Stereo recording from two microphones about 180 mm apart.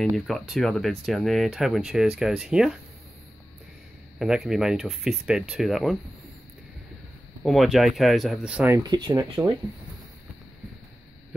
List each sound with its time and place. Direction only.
0.0 s speech: centre (ahead or behind)
4.2 s speech: centre (ahead or behind)
7.4 s speech: centre (ahead or behind)
8.7 s speech: 20° right (ahead or behind)